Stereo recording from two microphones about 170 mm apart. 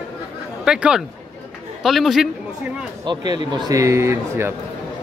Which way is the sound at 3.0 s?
25° right (ahead or behind).